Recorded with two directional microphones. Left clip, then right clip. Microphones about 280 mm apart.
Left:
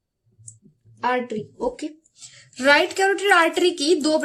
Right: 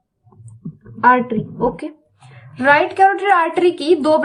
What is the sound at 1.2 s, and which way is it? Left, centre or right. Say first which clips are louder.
Speech: right 7 dB; left.